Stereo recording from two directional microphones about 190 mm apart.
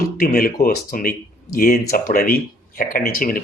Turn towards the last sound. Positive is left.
turn(degrees=50)  # may be behind; listen again after turning